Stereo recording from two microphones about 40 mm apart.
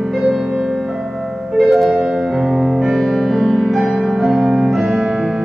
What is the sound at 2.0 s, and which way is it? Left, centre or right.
Music, centre.